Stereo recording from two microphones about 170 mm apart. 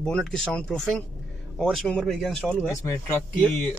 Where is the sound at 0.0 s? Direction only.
5° left (ahead or behind).